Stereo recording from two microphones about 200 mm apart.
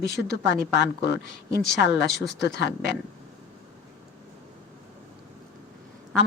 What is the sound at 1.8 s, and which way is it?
Speech, 60° left (ahead or behind).